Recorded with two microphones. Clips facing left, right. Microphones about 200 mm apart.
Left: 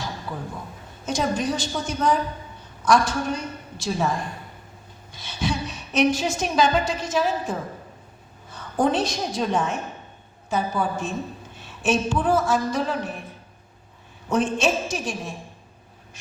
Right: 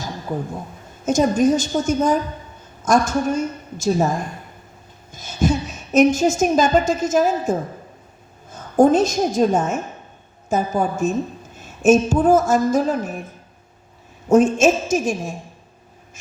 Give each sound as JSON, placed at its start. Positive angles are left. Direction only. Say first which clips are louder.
{"t": 0.0, "sound": "a sound", "louder": "right 6 dB", "side_deg": -45}
{"t": 1.0, "sound": "a woman's voice", "louder": "right 8 dB", "side_deg": -45}
{"t": 14.3, "sound": "a woman's voice", "louder": "right 8 dB", "side_deg": -45}